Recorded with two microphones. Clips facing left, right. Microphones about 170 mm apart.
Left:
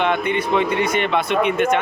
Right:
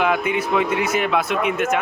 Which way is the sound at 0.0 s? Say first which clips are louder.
Even; 5° right (ahead or behind).